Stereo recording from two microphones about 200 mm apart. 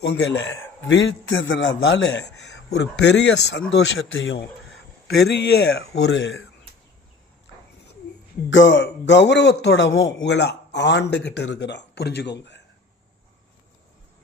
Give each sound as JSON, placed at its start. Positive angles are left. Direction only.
{"t": 0.0, "sound": "a man's voice", "side_deg": 60}
{"t": 0.9, "sound": "a man's voice", "side_deg": 70}
{"t": 3.7, "sound": "speech", "side_deg": 70}
{"t": 5.0, "sound": "a man's voice", "side_deg": 55}
{"t": 8.4, "sound": "a man's voice", "side_deg": 70}
{"t": 10.2, "sound": "a man's voice", "side_deg": 60}